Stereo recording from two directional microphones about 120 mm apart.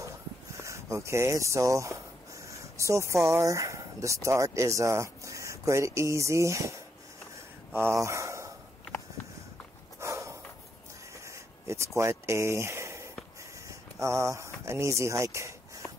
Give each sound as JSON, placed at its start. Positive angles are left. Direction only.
{"t": 0.6, "sound": "speech", "side_deg": -25}
{"t": 7.3, "sound": "gasp", "side_deg": -20}
{"t": 9.9, "sound": "snort", "side_deg": -25}
{"t": 11.2, "sound": "a sound", "side_deg": -25}